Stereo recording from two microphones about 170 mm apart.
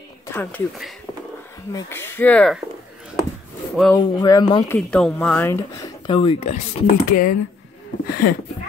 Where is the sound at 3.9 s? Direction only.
20° left (ahead or behind).